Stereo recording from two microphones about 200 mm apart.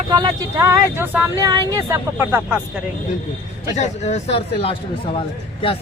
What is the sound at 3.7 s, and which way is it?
A man's voice, 35° left (ahead or behind).